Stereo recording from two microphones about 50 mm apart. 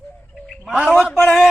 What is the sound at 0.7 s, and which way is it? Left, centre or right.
Speech, right.